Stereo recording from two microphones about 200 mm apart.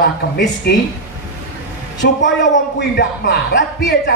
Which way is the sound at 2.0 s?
60° left (ahead or behind).